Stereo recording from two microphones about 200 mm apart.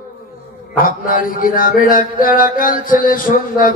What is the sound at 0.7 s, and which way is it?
A man's voice, 45° left (ahead or behind).